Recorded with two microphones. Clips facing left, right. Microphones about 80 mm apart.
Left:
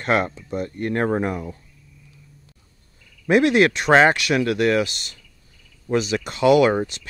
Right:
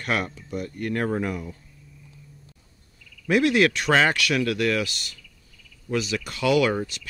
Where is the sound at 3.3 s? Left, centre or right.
Left.